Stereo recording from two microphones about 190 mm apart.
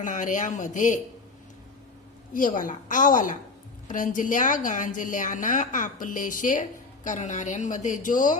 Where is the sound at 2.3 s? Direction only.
45° left (ahead or behind).